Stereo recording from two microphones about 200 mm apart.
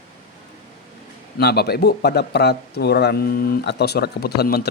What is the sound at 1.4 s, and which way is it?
A man's voice, 55° left (ahead or behind).